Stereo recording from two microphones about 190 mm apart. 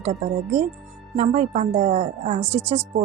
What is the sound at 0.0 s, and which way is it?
Speech, 35° right (ahead or behind).